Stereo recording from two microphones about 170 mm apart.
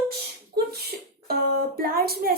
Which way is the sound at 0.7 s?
65° right (ahead or behind).